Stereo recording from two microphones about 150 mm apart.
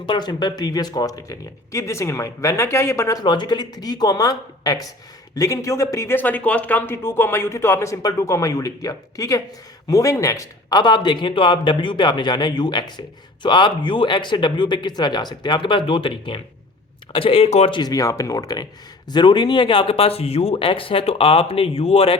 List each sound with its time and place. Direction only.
0.0 s a man's voice: 30° left (ahead or behind)
17.7 s a man's voice: 25° left (ahead or behind)